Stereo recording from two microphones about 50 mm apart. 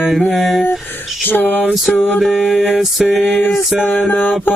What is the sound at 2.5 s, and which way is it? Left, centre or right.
Mantra, centre.